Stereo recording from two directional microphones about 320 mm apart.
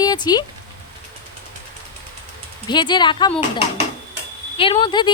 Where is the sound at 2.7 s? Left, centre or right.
Centre.